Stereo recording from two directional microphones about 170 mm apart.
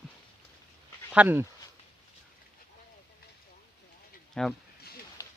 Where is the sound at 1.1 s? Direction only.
10° right (ahead or behind).